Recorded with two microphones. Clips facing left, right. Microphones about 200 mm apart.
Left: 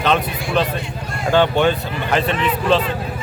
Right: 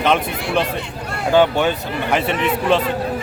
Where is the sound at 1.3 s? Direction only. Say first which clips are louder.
Even; 10° right (ahead or behind).